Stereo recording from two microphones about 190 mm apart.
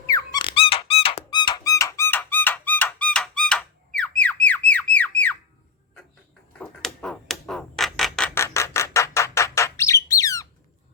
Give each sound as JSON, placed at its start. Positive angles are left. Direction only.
{"t": 0.0, "sound": "squeak", "side_deg": 20}
{"t": 4.4, "sound": "squawk", "side_deg": 10}
{"t": 6.6, "sound": "a sound", "side_deg": 5}
{"t": 8.4, "sound": "bird", "side_deg": 15}